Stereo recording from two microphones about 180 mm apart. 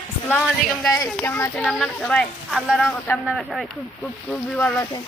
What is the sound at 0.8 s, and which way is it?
Speech, 15° left (ahead or behind).